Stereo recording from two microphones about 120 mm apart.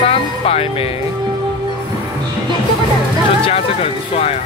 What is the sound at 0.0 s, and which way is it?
Music, 55° left (ahead or behind).